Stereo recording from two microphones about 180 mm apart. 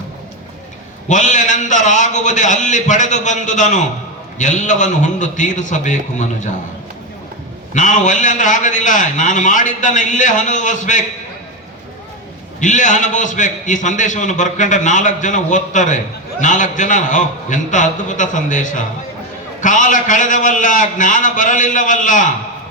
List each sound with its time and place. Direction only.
1.0 s a man's voice: 45° left (ahead or behind)
7.7 s a man's voice: 45° left (ahead or behind)
12.5 s a man's voice: 45° left (ahead or behind)